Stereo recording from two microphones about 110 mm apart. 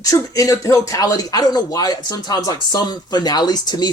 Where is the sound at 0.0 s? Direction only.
30° left (ahead or behind).